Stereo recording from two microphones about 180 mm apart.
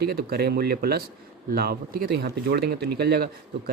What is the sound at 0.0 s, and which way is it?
Speech, 60° right (ahead or behind).